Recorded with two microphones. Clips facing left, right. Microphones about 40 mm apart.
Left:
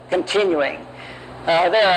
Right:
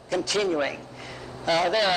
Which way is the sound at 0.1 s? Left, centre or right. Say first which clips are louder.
Left 7 dB; left.